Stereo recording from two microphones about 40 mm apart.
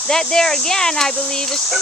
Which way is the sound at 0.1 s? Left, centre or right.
Centre.